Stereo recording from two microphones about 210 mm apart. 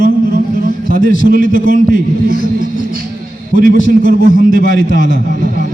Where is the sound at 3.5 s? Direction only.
40° right (ahead or behind).